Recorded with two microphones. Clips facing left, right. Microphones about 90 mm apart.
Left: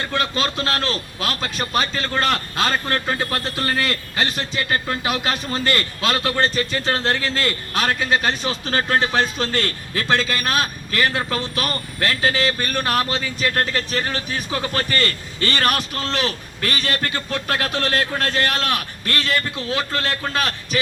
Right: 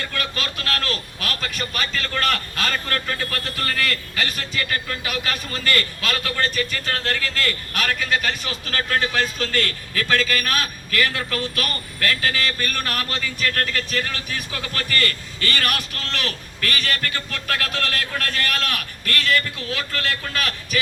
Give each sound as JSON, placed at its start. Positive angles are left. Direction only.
{"t": 0.0, "sound": "a man's voice", "side_deg": 25}